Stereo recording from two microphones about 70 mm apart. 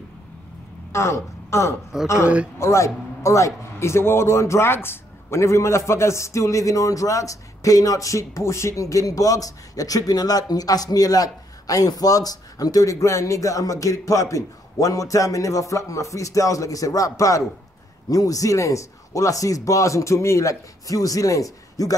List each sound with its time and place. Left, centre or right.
0.9 s speech: left
2.2 s speech: centre
2.6 s a man's voice: left